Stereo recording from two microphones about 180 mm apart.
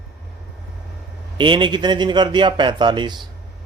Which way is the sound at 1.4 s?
25° right (ahead or behind).